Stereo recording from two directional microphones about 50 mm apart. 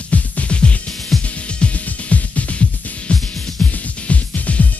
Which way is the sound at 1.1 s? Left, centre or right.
Centre.